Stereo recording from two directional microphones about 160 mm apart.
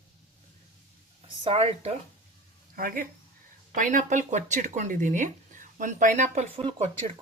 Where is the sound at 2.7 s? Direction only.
60° right (ahead or behind); by 6.6 s 45° right (ahead or behind).